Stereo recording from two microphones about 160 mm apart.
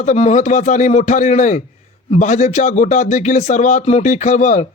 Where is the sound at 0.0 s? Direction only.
45° left (ahead or behind).